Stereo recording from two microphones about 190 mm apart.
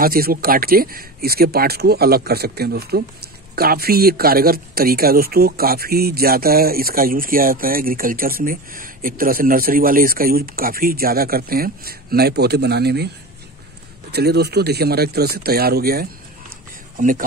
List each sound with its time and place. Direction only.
0.0 s speech: 50° right (ahead or behind)
14.1 s speech: 60° right (ahead or behind)